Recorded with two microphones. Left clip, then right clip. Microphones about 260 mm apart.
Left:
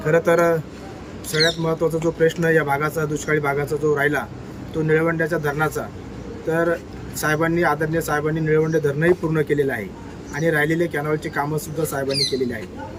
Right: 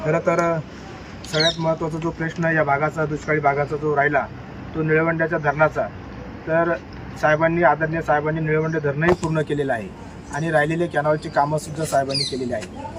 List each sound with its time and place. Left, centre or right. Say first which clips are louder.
0.0 s speech: left 3 dB; centre
1.6 s speech: left 2 dB; centre
9.3 s speech: left 2 dB; centre